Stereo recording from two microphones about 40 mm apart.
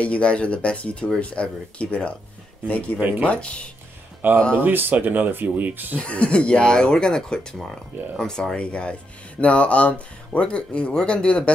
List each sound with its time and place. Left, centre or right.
0.0 s speech: left
3.0 s speech: right
3.3 s speech: left
4.2 s speech: right
5.0 s speech: right
5.5 s speech: right
5.9 s speech: left; by 8.5 s centre
8.5 s speech: left